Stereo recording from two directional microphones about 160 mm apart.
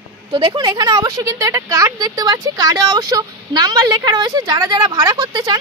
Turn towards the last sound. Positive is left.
turn(degrees=-25)  # may be behind; listen again after turning